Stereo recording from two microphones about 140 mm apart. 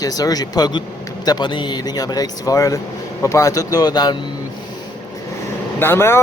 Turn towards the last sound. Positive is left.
turn(degrees=15)  # may be behind; listen again after turning